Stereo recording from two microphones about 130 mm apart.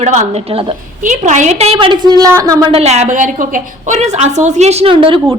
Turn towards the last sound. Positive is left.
turn(degrees=-45)  # may be behind; listen again after turning